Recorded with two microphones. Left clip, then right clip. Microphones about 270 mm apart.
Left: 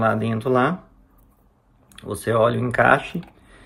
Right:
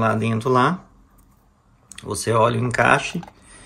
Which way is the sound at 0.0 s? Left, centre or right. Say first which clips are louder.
Even; centre.